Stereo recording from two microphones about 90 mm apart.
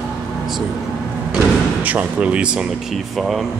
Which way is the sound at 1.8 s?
20° right (ahead or behind).